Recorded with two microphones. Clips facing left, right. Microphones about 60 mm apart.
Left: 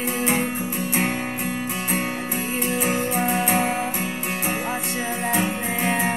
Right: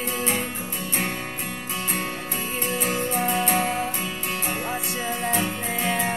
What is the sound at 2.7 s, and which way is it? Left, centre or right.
Music, centre.